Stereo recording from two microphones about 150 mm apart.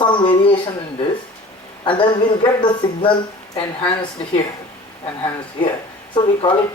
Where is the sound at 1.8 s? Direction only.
35° left (ahead or behind).